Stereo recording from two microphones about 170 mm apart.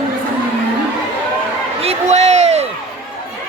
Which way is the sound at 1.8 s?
40° right (ahead or behind).